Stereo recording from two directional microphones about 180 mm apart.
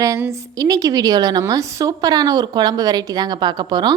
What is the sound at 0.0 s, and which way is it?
A woman's voice, 15° right (ahead or behind).